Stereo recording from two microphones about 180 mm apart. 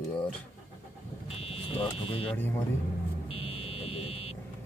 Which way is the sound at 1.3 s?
35° left (ahead or behind).